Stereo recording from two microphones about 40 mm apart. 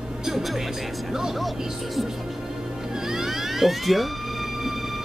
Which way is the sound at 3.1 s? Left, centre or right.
Centre.